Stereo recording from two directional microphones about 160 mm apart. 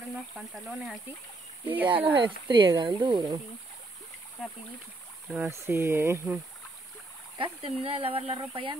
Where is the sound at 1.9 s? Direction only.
30° right (ahead or behind).